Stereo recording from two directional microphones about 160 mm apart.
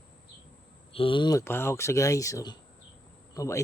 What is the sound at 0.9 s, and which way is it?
Speech, 30° left (ahead or behind).